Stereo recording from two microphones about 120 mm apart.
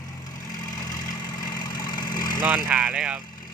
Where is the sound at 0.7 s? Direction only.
30° left (ahead or behind).